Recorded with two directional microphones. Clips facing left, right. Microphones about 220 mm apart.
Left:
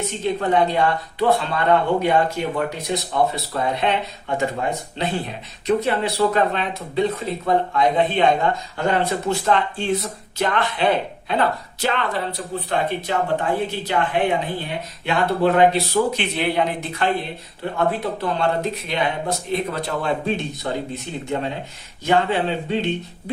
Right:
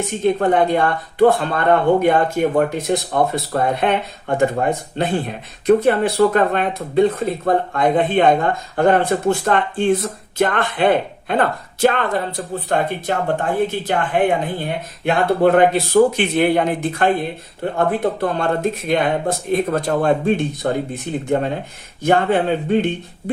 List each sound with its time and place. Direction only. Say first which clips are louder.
0.3 s speech: even; 50° right (ahead or behind)